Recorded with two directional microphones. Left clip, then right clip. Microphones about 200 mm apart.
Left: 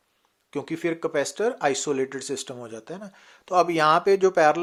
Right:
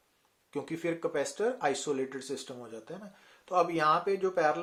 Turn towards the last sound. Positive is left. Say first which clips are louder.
# left 10 dB
turn(degrees=40)  # may be behind; listen again after turning